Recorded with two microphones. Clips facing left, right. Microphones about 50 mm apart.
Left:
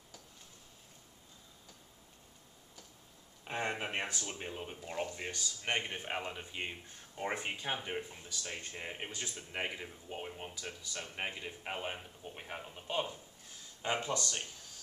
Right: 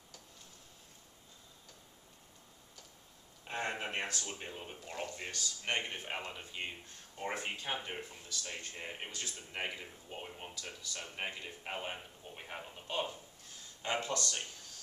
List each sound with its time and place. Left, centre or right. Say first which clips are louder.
3.4 s speech: left 1 dB; centre
13.8 s speech: left 1 dB; centre